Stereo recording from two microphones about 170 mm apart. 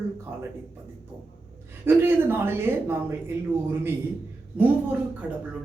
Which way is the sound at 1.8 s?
15° right (ahead or behind).